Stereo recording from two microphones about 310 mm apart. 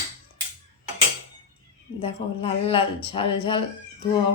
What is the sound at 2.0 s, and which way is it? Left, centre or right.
A woman's voice, centre.